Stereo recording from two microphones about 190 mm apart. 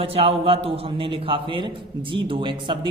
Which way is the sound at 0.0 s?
30° right (ahead or behind).